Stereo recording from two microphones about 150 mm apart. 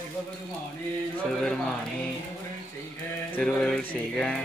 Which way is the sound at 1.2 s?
5° left (ahead or behind).